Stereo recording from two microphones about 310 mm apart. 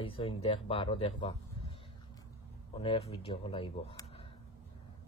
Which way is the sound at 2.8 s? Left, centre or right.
Centre.